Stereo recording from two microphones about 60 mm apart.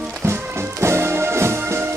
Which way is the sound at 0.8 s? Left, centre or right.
Right.